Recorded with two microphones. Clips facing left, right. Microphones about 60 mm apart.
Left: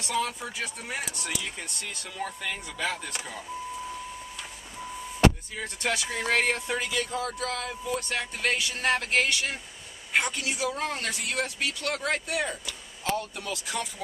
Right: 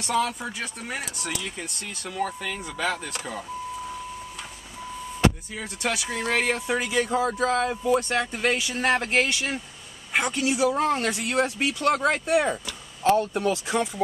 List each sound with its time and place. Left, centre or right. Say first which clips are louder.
0.0 s speech: right 4 dB; centre
5.6 s speech: right 1 dB; centre
6.9 s speech: right 7 dB; right
10.7 s speech: right 8 dB; right